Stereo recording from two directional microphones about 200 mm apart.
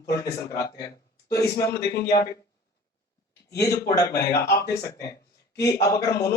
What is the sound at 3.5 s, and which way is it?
A man's voice, 15° left (ahead or behind).